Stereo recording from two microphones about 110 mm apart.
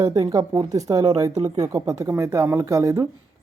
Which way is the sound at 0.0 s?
35° right (ahead or behind).